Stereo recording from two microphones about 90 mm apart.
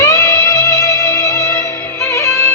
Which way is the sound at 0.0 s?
35° left (ahead or behind).